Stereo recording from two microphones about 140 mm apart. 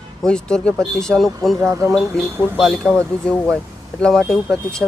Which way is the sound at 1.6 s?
20° right (ahead or behind).